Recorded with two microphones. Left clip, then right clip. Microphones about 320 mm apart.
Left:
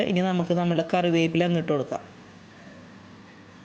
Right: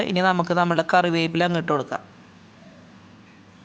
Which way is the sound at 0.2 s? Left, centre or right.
Centre.